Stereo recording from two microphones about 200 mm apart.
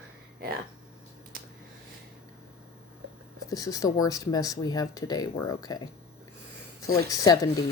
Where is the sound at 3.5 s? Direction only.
15° left (ahead or behind).